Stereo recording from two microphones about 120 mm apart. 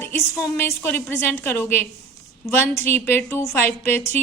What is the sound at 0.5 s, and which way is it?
A woman's voice, 15° left (ahead or behind).